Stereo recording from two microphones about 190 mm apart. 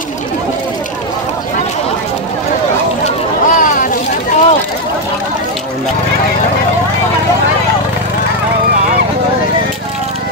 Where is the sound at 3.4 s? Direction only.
45° left (ahead or behind).